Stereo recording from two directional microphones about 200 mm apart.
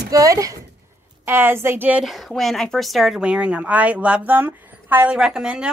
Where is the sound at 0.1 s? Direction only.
15° right (ahead or behind).